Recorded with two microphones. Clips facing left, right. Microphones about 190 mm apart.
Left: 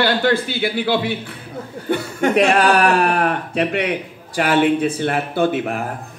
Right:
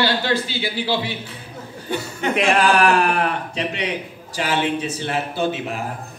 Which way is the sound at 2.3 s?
40° left (ahead or behind).